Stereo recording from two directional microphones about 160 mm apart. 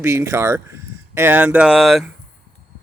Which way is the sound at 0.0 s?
15° right (ahead or behind).